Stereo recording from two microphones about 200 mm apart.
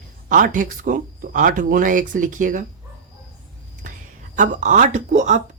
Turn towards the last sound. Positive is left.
turn(degrees=-35)  # may be behind; listen again after turning